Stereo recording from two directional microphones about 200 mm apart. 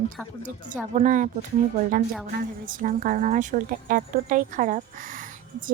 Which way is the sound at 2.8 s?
40° right (ahead or behind).